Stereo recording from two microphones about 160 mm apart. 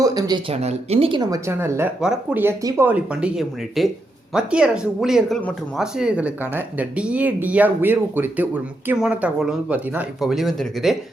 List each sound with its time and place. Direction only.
0.0 s speech: 25° right (ahead or behind)
0.5 s speech: 40° right (ahead or behind); by 5.4 s centre (ahead or behind)
5.4 s speech: 10° left (ahead or behind)
5.8 s speech: 5° right (ahead or behind)